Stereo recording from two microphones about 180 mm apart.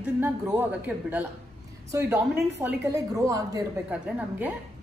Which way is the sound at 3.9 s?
10° right (ahead or behind).